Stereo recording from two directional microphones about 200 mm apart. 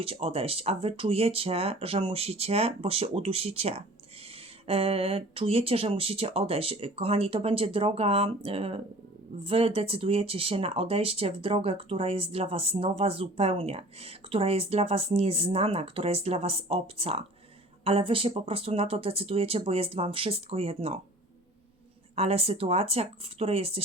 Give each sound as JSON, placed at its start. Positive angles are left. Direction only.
{"t": 0.0, "sound": "speech", "side_deg": -30}
{"t": 22.1, "sound": "speech", "side_deg": -30}